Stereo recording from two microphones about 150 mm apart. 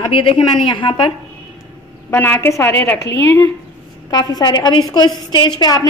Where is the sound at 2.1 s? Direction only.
15° left (ahead or behind).